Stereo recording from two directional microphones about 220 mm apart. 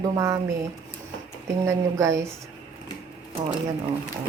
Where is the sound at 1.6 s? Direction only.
15° right (ahead or behind).